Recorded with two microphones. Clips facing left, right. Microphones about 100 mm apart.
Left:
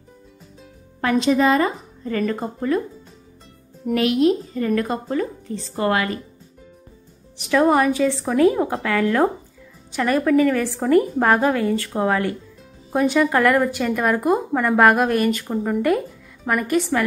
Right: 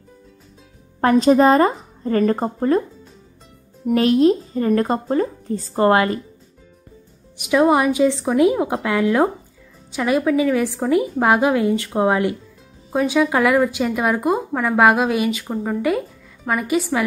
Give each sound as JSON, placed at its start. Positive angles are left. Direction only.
{"t": 1.0, "sound": "a woman's voice", "side_deg": -40}
{"t": 3.9, "sound": "a woman's voice", "side_deg": -35}
{"t": 7.3, "sound": "a woman's voice", "side_deg": -10}
{"t": 12.9, "sound": "a woman's voice", "side_deg": -5}